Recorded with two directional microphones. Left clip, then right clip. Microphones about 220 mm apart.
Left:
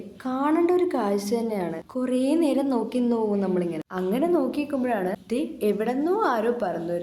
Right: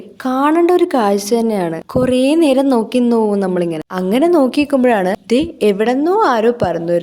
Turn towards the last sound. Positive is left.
turn(degrees=-40)  # may be behind; listen again after turning